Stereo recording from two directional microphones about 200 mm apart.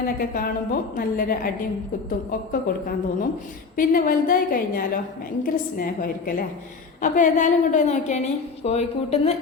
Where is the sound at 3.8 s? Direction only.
45° left (ahead or behind).